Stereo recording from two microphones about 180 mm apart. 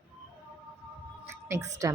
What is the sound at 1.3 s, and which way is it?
Music, 15° right (ahead or behind).